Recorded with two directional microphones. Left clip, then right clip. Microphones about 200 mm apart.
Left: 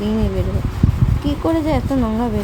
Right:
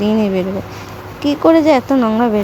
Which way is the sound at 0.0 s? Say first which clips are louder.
Right 6 dB; 15° right (ahead or behind).